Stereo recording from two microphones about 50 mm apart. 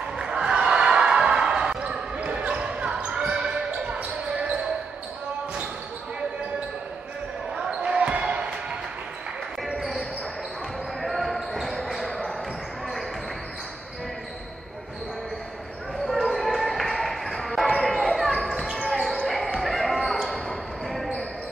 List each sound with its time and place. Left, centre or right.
0.2 s basketball bounce: centre
7.8 s basketball bounce: right
11.0 s basketball bounce: centre
16.1 s basketball bounce: centre
18.0 s basketball bounce: centre